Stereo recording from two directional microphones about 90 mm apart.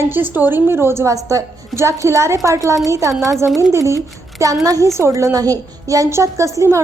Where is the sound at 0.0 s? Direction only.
25° right (ahead or behind); by 3.3 s 40° right (ahead or behind).